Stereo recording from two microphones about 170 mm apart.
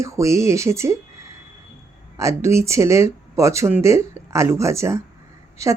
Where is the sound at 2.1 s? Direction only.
15° right (ahead or behind).